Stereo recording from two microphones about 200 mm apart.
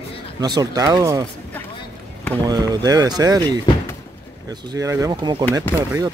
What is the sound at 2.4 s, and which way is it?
Speech, 20° right (ahead or behind).